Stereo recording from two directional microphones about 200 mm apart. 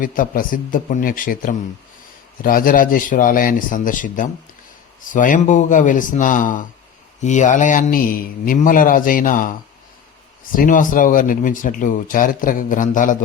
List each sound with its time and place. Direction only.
0.0 s a man's voice: 45° left (ahead or behind)